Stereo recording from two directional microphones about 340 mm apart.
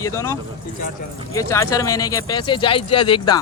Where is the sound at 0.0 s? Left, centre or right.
Centre.